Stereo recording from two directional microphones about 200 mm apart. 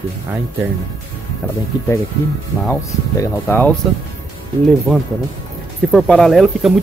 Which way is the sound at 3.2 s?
10° left (ahead or behind).